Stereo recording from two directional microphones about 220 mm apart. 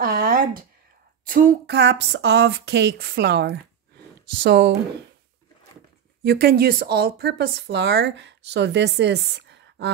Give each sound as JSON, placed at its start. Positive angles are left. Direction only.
{"t": 0.0, "sound": "a sound", "side_deg": -40}
{"t": 1.2, "sound": "speech", "side_deg": -40}
{"t": 6.2, "sound": "speech", "side_deg": -45}